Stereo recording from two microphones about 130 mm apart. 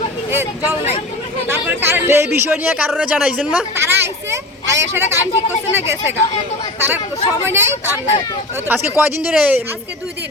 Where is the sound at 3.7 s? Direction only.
20° right (ahead or behind).